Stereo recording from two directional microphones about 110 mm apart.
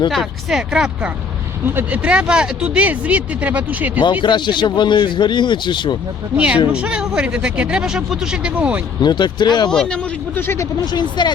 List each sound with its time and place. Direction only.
0.1 s speech: centre (ahead or behind)
4.0 s a man's voice: 45° left (ahead or behind)
6.3 s speech: 10° right (ahead or behind)
9.0 s speech: 40° left (ahead or behind)
9.6 s speech: 5° left (ahead or behind)
10.3 s speech: 20° left (ahead or behind)
11.2 s a man's voice: 40° left (ahead or behind)